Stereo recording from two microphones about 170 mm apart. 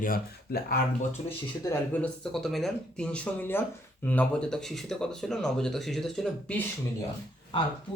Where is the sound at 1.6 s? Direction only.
10° left (ahead or behind).